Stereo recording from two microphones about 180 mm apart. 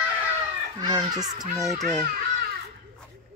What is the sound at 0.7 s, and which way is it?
Speech, 20° right (ahead or behind).